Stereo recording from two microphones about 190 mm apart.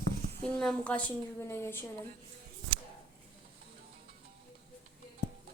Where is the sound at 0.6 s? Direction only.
5° left (ahead or behind).